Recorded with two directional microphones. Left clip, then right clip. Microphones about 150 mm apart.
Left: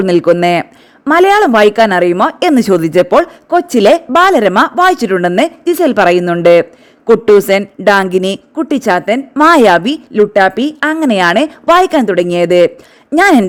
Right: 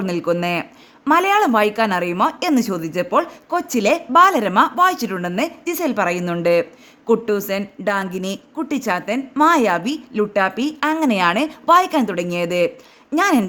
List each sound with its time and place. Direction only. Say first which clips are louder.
0.0 s a woman's voice: left 12 dB; 55° left (ahead or behind)
3.2 s a woman's voice: left 9 dB; 40° left (ahead or behind)
4.1 s a woman's voice: left 4 dB; 25° left (ahead or behind)
4.4 s a woman's voice: left 6 dB; 45° left (ahead or behind)
8.5 s a woman's voice: left 9 dB; 50° left (ahead or behind)
9.3 s a woman's voice: left 7 dB; 35° left (ahead or behind)
9.6 s a woman's voice: left 11 dB; 50° left (ahead or behind)